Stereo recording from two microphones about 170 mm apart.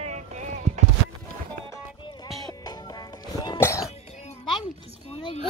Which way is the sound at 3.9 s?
40° left (ahead or behind).